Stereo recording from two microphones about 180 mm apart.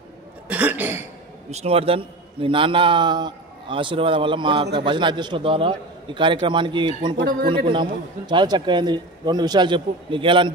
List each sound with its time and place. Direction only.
0.5 s cough: 10° right (ahead or behind)
1.5 s a man's voice: 35° right (ahead or behind)
7.2 s speech: 70° right (ahead or behind)
7.7 s a man's voice: 25° right (ahead or behind)